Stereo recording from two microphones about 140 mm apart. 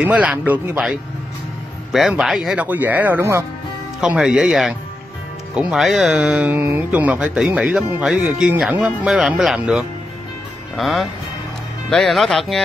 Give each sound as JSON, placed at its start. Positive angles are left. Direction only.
{"t": 0.0, "sound": "speech", "side_deg": -5}
{"t": 1.9, "sound": "speech", "side_deg": -5}
{"t": 4.0, "sound": "speech", "side_deg": -5}